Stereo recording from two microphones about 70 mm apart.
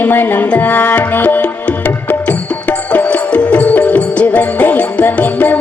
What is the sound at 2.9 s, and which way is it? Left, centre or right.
Music, centre.